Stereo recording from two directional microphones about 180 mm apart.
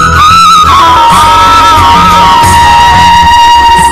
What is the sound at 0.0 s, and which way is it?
Music, centre (ahead or behind).